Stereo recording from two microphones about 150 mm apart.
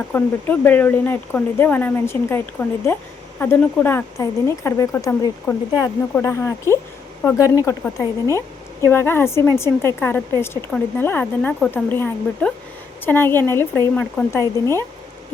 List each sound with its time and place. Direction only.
0.1 s speech: 15° left (ahead or behind)